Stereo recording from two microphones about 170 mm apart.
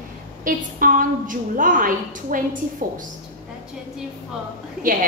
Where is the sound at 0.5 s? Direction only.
55° right (ahead or behind).